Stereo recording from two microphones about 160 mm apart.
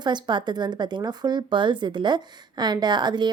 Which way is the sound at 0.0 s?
30° right (ahead or behind).